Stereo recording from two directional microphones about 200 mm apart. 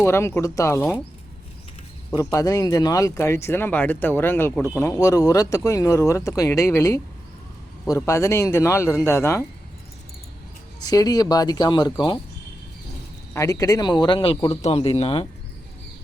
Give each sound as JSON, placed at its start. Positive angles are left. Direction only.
{"t": 0.0, "sound": "speech", "side_deg": 15}
{"t": 2.0, "sound": "speech", "side_deg": 15}
{"t": 10.8, "sound": "speech", "side_deg": 20}
{"t": 13.3, "sound": "speech", "side_deg": 15}